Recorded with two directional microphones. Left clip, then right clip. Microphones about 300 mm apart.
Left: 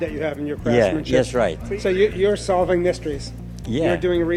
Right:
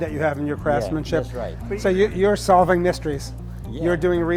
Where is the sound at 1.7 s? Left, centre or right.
Right.